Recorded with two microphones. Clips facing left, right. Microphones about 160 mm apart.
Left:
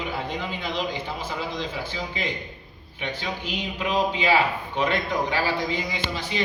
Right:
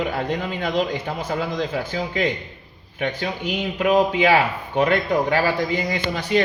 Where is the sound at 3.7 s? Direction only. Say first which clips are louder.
Right 7 dB; 55° right (ahead or behind).